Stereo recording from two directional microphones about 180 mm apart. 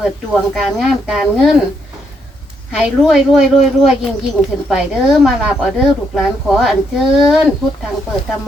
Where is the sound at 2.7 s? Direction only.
5° right (ahead or behind).